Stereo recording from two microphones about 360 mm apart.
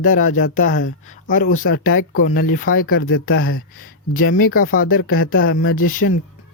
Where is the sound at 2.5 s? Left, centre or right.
Left.